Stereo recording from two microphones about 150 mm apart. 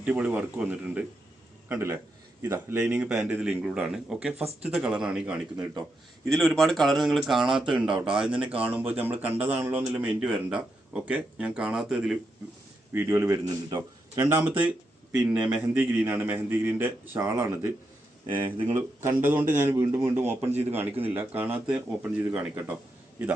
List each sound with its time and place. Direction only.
0.0 s speech: 10° right (ahead or behind)
2.4 s speech: 20° right (ahead or behind)
12.9 s a man's voice: 15° right (ahead or behind)
14.3 s speech: 15° right (ahead or behind)
18.3 s speech: 30° right (ahead or behind)
19.0 s speech: 15° right (ahead or behind)